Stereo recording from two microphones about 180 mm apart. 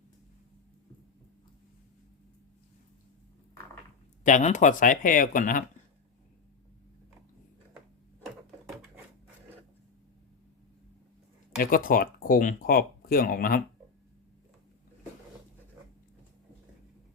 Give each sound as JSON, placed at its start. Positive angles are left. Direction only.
{"t": 4.2, "sound": "speech", "side_deg": 45}
{"t": 11.5, "sound": "speech", "side_deg": 50}